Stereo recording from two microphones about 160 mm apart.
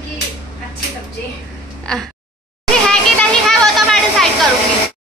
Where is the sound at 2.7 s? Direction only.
5° left (ahead or behind).